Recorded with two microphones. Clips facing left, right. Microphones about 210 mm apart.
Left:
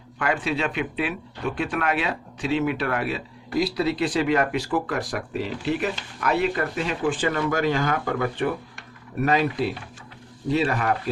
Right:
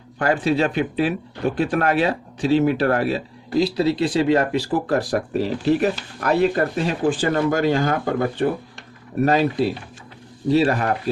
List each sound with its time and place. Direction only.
0.2 s speech: 35° right (ahead or behind)